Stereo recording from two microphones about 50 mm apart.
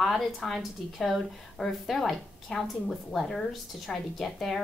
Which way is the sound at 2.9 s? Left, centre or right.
Centre.